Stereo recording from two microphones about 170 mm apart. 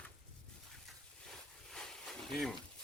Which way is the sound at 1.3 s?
5° left (ahead or behind).